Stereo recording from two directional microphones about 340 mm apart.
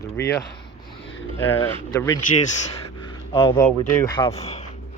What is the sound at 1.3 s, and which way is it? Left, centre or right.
Speech, centre.